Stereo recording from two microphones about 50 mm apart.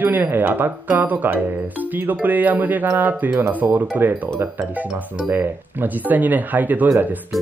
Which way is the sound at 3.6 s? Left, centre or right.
Right.